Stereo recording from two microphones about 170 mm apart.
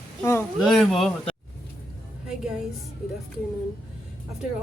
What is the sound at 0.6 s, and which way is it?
Speech, centre (ahead or behind).